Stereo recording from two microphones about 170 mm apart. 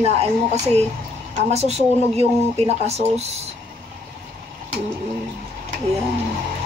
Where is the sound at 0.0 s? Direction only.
40° right (ahead or behind).